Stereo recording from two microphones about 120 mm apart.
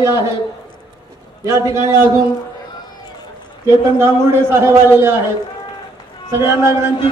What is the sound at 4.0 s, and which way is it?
A man's voice, 20° right (ahead or behind).